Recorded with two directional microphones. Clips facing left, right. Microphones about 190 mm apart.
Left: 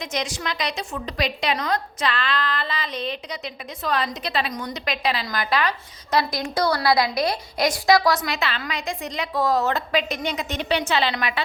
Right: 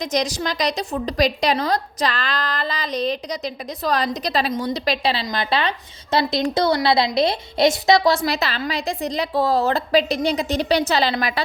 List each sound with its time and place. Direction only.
0.0 s a woman's voice: 40° right (ahead or behind)